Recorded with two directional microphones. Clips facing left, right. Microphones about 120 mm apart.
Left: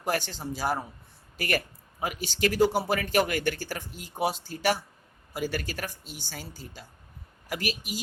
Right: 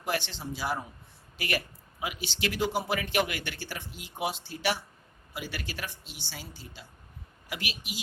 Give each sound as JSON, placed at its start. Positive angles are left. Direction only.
{"t": 0.0, "sound": "speech", "side_deg": 45}